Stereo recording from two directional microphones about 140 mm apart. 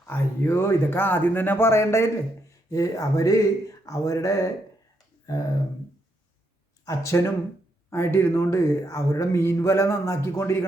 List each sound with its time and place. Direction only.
0.0 s a man's voice: 20° left (ahead or behind)
6.8 s a man's voice: 20° left (ahead or behind)